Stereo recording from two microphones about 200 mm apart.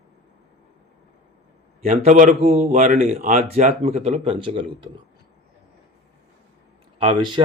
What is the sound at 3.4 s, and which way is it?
A man's voice, 30° right (ahead or behind).